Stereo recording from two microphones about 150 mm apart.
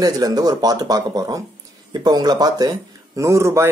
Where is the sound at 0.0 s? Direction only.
25° right (ahead or behind).